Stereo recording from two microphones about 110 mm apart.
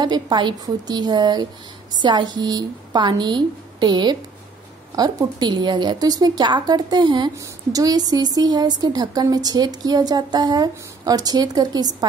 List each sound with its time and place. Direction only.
0.0 s a woman's voice: 40° right (ahead or behind)